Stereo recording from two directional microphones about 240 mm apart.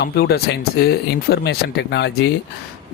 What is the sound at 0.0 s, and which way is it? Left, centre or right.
Speech, left.